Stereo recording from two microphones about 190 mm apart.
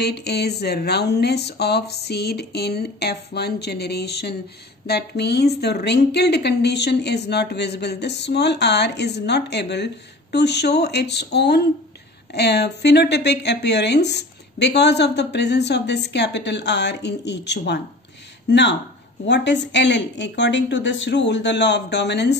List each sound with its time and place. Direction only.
0.0 s speech: 60° left (ahead or behind)